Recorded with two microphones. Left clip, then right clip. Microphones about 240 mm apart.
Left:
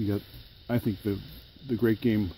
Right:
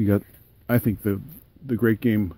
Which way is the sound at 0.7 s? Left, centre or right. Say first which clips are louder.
Right 6 dB; right.